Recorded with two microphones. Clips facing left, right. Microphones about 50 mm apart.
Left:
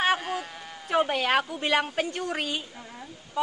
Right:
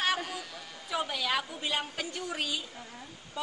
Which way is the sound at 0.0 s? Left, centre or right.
Left.